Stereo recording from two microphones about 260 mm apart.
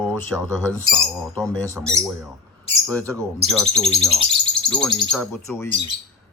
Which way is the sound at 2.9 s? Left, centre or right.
Centre.